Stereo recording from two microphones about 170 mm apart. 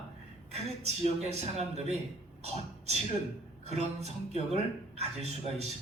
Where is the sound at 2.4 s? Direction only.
40° right (ahead or behind).